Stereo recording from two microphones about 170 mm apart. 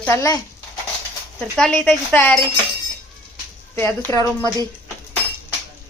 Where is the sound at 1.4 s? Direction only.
5° left (ahead or behind).